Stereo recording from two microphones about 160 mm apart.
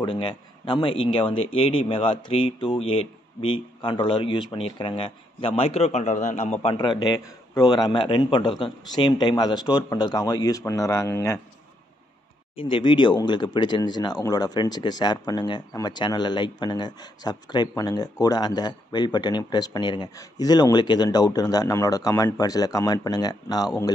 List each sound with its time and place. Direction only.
0.0 s speech: 30° left (ahead or behind)
12.5 s speech: 30° left (ahead or behind)